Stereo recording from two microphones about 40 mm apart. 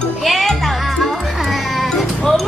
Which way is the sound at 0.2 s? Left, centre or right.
Centre.